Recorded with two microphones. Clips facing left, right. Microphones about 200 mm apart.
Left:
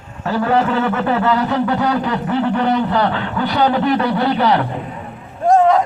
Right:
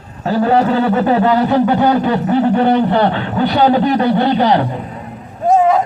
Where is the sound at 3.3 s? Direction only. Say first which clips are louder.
Right 4 dB; 25° right (ahead or behind).